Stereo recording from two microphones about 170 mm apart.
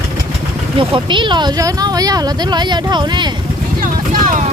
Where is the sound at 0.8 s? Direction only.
30° right (ahead or behind).